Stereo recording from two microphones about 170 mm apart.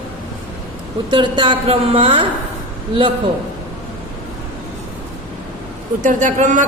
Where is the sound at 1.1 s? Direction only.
30° right (ahead or behind).